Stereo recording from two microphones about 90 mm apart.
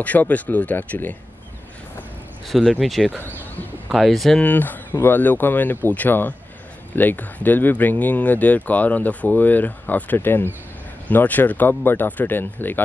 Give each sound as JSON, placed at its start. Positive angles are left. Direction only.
{"t": 0.0, "sound": "speech", "side_deg": 15}
{"t": 2.4, "sound": "speech", "side_deg": 0}
{"t": 4.4, "sound": "speech", "side_deg": 20}